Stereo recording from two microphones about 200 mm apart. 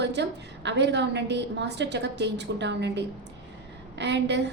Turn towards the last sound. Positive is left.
turn(degrees=-60)  # may be behind; listen again after turning